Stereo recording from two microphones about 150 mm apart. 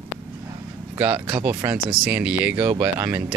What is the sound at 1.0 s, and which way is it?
Speech, 10° right (ahead or behind).